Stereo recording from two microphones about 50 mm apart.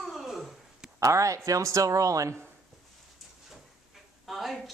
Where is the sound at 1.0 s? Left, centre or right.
Right.